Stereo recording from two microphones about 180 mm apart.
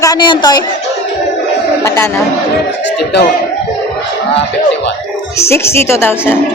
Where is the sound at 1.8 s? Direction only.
15° left (ahead or behind).